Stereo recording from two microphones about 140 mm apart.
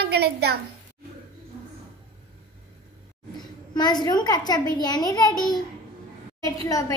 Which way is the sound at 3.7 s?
30° left (ahead or behind).